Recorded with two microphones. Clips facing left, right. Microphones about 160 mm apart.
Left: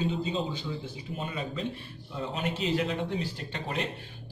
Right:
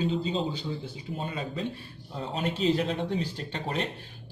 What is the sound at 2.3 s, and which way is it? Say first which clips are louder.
Speech: right 4 dB; 35° right (ahead or behind).